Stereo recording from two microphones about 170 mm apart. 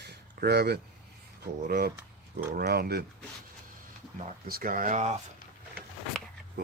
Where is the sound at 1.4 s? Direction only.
65° right (ahead or behind).